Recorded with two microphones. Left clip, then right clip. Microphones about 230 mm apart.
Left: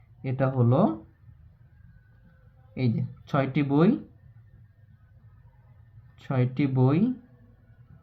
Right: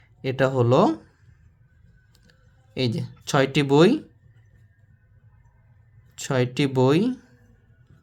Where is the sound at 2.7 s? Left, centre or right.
Right.